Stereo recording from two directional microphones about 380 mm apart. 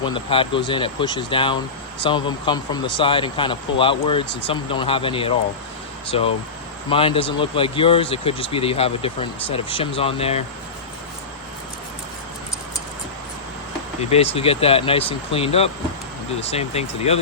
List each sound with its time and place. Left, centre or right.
0.0 s speech: centre
14.1 s speech: centre